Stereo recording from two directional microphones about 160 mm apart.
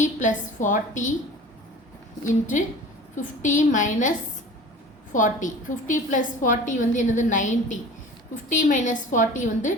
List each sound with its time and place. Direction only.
0.0 s a woman's voice: 50° left (ahead or behind)
3.2 s a woman's voice: 50° left (ahead or behind)
5.1 s a woman's voice: 50° left (ahead or behind)